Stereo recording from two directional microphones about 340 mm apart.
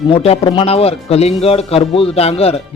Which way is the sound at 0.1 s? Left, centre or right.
Centre.